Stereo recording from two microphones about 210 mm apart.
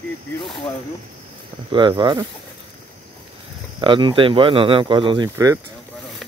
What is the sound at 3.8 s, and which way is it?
Speech, 25° right (ahead or behind).